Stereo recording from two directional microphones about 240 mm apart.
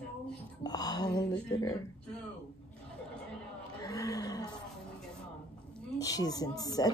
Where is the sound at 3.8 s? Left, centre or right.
Centre.